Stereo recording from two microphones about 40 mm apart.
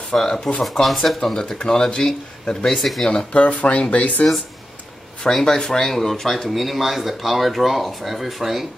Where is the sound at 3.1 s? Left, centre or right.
Left.